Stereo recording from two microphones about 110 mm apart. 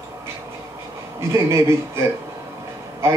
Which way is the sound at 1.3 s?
25° right (ahead or behind).